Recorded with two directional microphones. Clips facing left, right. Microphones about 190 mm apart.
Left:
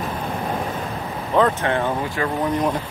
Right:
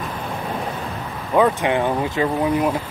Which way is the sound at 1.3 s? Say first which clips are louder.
Right 2 dB; 10° right (ahead or behind).